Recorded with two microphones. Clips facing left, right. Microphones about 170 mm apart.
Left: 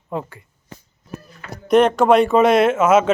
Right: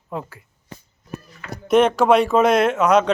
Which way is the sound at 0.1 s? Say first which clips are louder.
Left 3 dB; centre (ahead or behind).